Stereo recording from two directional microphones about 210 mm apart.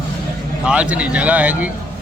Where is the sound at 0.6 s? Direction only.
5° right (ahead or behind).